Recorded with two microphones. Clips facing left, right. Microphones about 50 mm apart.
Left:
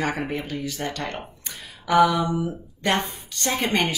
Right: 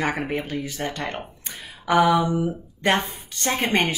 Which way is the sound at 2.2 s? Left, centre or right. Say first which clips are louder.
Right 2 dB; centre.